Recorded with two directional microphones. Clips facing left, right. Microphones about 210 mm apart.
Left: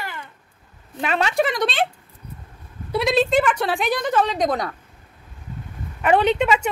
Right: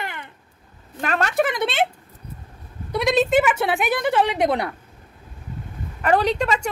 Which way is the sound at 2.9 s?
Centre (ahead or behind).